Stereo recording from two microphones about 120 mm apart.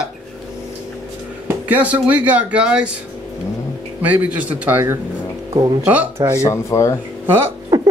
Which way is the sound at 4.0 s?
10° right (ahead or behind).